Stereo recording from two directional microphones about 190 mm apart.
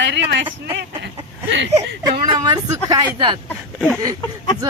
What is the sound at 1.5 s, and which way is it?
Speech, 70° right (ahead or behind).